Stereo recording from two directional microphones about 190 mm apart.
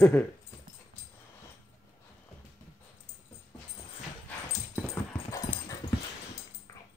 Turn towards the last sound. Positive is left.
turn(degrees=20)  # may be behind; listen again after turning